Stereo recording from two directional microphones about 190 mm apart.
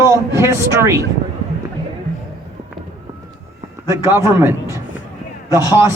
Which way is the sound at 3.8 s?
15° right (ahead or behind).